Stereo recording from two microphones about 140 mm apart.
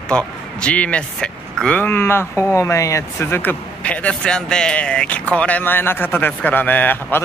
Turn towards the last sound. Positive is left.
turn(degrees=15)  # may be behind; listen again after turning